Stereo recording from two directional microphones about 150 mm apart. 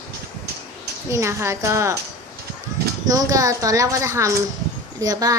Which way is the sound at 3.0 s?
25° right (ahead or behind).